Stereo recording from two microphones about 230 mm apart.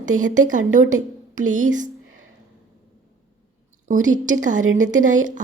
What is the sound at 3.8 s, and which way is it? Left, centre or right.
A woman's voice, right.